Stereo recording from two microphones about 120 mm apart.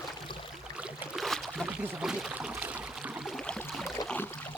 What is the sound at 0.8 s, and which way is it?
Boat, centre (ahead or behind).